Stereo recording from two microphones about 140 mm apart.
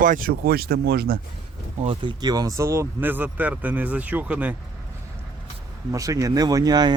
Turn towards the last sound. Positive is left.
turn(degrees=-30)  # may be behind; listen again after turning